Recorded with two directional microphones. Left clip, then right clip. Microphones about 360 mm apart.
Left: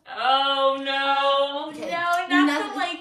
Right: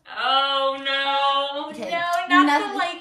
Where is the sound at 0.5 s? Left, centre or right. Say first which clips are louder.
Even; centre.